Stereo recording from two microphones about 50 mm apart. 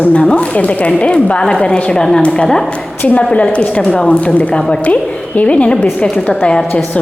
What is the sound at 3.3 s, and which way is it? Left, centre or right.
A woman's voice, left.